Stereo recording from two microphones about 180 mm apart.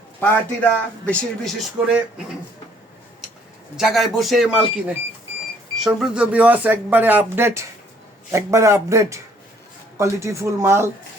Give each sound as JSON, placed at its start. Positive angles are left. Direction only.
{"t": 0.2, "sound": "speech", "side_deg": 10}
{"t": 3.8, "sound": "speech", "side_deg": 0}